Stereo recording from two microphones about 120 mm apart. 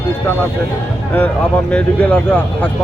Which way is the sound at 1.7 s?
10° left (ahead or behind).